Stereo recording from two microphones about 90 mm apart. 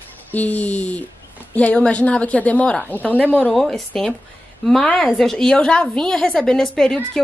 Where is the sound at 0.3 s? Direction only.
15° left (ahead or behind).